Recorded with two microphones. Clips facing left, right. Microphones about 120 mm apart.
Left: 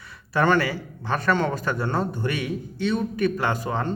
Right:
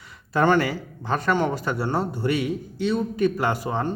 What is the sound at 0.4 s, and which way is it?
A man's voice, 20° right (ahead or behind).